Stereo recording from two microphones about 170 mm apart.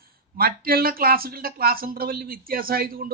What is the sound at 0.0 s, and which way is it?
Speech, 60° right (ahead or behind).